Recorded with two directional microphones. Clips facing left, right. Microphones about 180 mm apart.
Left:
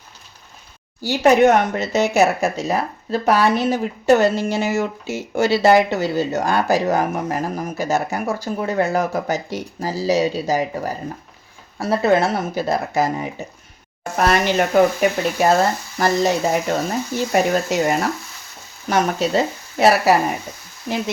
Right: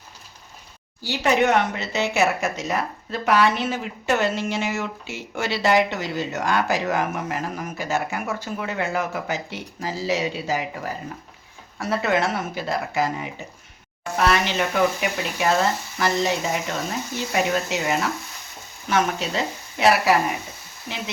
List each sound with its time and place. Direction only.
1.0 s speech: 45° left (ahead or behind)